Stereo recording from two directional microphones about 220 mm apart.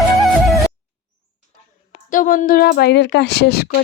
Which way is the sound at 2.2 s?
40° left (ahead or behind).